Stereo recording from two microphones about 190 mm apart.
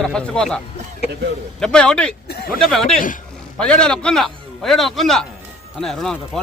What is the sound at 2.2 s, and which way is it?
Speech, 55° left (ahead or behind).